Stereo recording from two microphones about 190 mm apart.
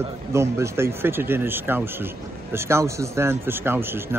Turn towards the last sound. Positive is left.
turn(degrees=-10)  # may be behind; listen again after turning